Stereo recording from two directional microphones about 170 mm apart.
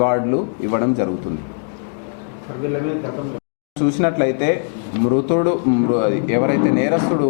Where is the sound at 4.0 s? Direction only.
15° left (ahead or behind).